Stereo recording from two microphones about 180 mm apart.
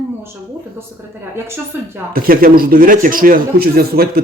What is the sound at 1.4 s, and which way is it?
Speech, 15° right (ahead or behind).